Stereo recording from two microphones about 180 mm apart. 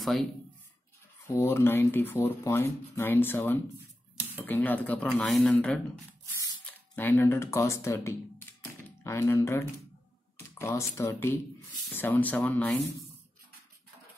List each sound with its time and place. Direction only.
1.2 s speech: 15° left (ahead or behind)